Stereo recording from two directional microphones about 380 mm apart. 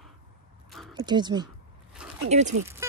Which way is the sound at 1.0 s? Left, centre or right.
Centre.